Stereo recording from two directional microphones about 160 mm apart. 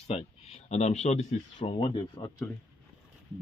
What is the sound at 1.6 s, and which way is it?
Speech, 30° left (ahead or behind).